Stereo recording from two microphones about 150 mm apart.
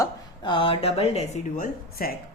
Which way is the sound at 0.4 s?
35° left (ahead or behind).